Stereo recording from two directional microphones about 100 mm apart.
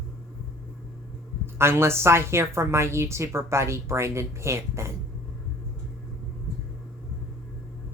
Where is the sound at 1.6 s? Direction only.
25° right (ahead or behind).